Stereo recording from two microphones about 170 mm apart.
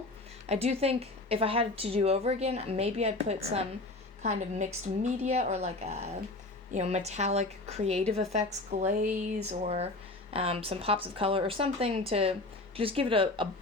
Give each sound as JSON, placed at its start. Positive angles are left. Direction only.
{"t": 0.4, "sound": "a woman's voice", "side_deg": -40}